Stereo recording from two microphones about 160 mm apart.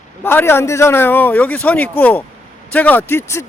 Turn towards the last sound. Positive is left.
turn(degrees=15)  # may be behind; listen again after turning